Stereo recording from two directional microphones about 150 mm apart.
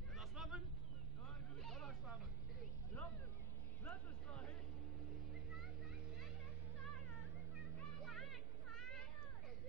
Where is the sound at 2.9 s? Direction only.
20° left (ahead or behind).